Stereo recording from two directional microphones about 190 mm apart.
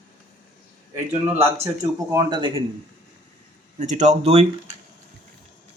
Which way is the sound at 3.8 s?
40° right (ahead or behind).